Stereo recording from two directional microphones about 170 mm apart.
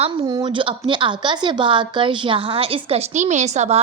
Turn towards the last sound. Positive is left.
turn(degrees=-45)  # may be behind; listen again after turning